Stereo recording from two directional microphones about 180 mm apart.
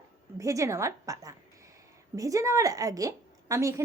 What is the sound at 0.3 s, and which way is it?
A woman's voice, 15° right (ahead or behind).